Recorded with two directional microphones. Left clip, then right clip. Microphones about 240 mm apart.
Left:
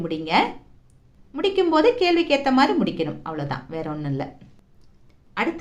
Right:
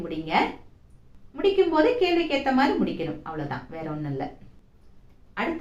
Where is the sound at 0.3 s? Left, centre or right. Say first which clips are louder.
Left 3 dB; left.